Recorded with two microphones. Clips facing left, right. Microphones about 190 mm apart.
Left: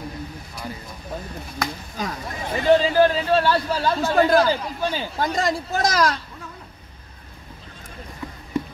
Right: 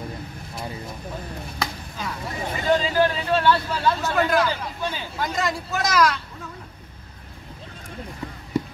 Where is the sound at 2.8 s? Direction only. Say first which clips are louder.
Left 4 dB; 35° left (ahead or behind).